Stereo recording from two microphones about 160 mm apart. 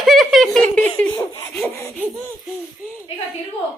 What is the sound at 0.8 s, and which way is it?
Giggle, 10° left (ahead or behind).